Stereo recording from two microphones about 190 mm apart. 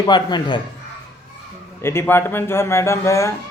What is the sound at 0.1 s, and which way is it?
Speech, 25° left (ahead or behind).